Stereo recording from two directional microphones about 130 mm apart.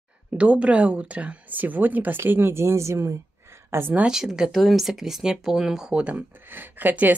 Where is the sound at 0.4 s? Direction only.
10° right (ahead or behind).